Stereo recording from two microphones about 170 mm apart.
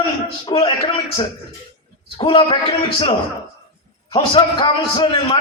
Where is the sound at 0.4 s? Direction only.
35° left (ahead or behind).